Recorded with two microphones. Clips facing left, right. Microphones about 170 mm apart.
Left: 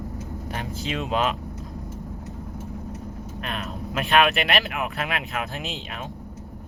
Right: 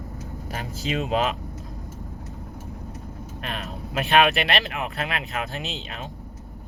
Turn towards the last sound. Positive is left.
turn(degrees=0)  # may be behind; listen again after turning